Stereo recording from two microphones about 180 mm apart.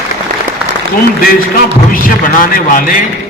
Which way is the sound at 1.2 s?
55° left (ahead or behind).